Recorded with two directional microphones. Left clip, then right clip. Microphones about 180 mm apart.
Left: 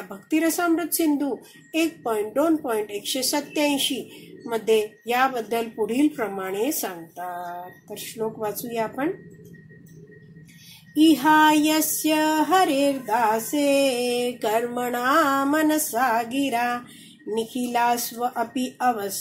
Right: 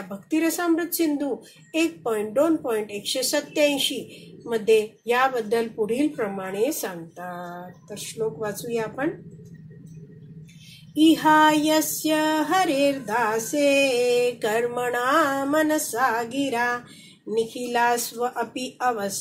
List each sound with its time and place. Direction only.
0.1 s a woman's voice: 40° left (ahead or behind)
7.9 s music: 45° left (ahead or behind)
11.0 s music: 35° left (ahead or behind)